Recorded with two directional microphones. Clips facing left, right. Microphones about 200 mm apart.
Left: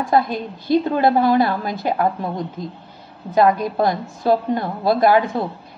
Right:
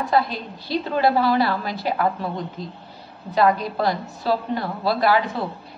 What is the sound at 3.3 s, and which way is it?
A woman's voice, 50° left (ahead or behind).